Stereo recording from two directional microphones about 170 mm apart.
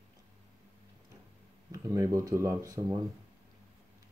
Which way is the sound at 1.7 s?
20° right (ahead or behind).